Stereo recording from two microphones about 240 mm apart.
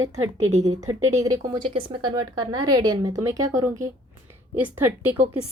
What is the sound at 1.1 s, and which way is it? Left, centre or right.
Speech, centre.